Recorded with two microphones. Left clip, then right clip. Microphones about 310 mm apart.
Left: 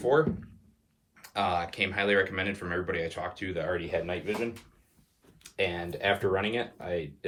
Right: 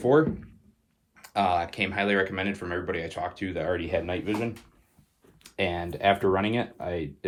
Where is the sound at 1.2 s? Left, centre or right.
Centre.